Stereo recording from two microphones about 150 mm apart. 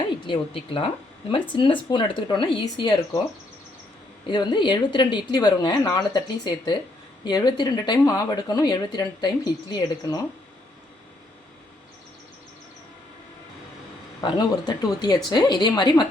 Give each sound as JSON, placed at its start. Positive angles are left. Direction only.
{"t": 0.3, "sound": "speech", "side_deg": 35}
{"t": 4.3, "sound": "speech", "side_deg": 30}
{"t": 14.2, "sound": "speech", "side_deg": 30}